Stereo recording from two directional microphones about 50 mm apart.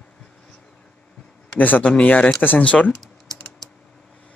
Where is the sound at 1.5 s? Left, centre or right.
Left.